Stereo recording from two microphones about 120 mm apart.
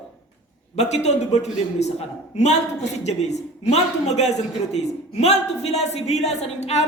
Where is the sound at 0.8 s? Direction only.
65° left (ahead or behind).